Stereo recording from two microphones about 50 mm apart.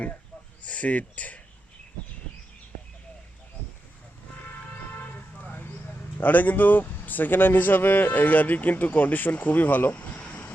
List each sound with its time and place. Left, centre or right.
0.6 s speech: left
4.9 s music: left
6.1 s speech: left